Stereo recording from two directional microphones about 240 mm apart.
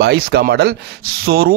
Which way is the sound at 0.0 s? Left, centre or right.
Right.